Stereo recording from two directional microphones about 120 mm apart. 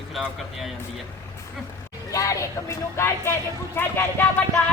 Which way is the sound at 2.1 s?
30° left (ahead or behind).